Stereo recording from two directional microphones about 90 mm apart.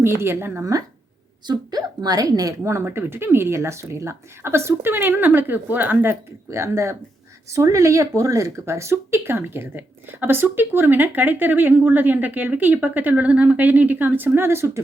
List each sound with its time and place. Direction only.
0.0 s speech: 30° right (ahead or behind)
1.5 s speech: 50° right (ahead or behind); by 14.8 s 30° right (ahead or behind)